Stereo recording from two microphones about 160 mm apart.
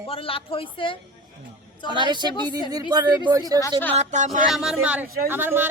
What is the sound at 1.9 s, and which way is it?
Speech, 30° right (ahead or behind).